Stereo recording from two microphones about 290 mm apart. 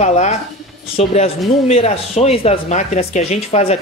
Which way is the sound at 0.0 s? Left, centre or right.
Left.